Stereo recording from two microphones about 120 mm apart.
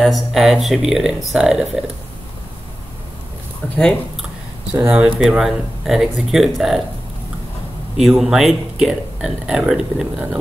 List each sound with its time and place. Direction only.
0.0 s speech: centre (ahead or behind)
3.6 s a sound: 15° left (ahead or behind)
4.7 s speech: 10° right (ahead or behind)
8.0 s speech: 5° right (ahead or behind)